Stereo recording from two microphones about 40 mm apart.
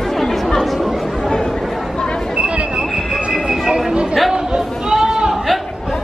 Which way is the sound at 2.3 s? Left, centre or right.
Right.